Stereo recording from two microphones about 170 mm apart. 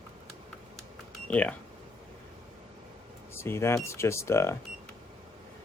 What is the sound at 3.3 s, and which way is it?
Speech, 15° left (ahead or behind).